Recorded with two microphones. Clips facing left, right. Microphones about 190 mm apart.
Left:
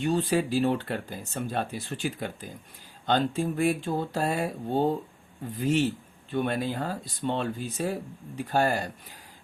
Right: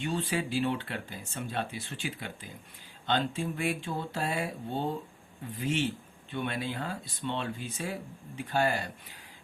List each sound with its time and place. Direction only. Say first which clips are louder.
0.0 s speech: left 7 dB; 40° left (ahead or behind)